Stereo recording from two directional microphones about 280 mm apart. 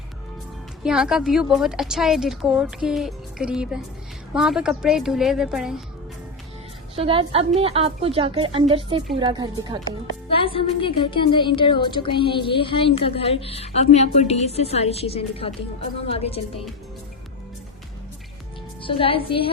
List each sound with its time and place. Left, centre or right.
0.8 s a woman's voice: centre
6.9 s a woman's voice: centre
10.2 s speech: centre
18.8 s speech: centre